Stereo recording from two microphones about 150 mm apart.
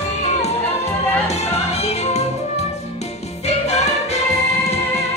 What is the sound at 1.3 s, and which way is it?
Music, 45° left (ahead or behind).